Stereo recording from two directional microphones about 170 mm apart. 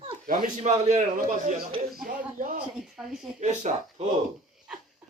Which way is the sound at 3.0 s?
Centre (ahead or behind).